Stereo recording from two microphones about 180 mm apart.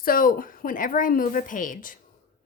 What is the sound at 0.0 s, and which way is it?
Speech, 50° left (ahead or behind).